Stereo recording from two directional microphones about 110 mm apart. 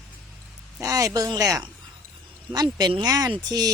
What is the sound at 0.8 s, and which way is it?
Speech, 30° right (ahead or behind).